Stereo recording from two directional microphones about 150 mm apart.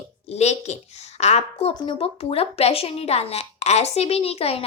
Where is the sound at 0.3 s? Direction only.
45° left (ahead or behind).